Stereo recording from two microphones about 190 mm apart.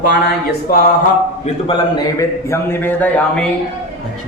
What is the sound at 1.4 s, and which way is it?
Mantra, 30° left (ahead or behind).